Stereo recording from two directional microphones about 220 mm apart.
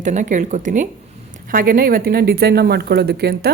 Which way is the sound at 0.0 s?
35° right (ahead or behind).